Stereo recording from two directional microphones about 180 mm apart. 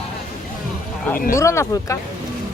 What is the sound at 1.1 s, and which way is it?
Speech, 50° left (ahead or behind).